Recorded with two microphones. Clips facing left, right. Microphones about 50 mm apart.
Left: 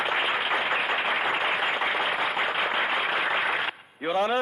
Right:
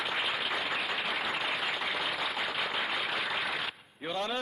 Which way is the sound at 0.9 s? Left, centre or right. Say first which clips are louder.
Left 7 dB; left.